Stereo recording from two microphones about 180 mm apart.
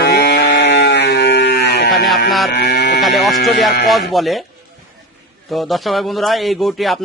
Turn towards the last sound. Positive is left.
turn(degrees=0)  # may be behind; listen again after turning